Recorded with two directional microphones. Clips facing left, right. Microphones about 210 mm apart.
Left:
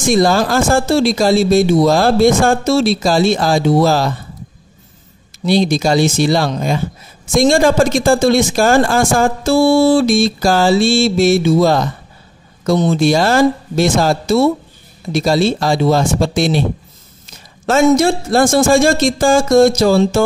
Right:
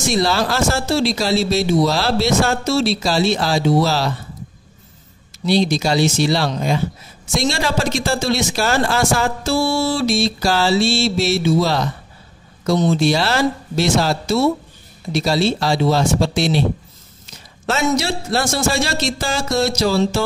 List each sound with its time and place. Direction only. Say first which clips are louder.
0.0 s speech: left 6 dB; 50° left (ahead or behind)
5.4 s speech: left 3 dB; 50° left (ahead or behind)
17.6 s speech: left 8 dB; 50° left (ahead or behind)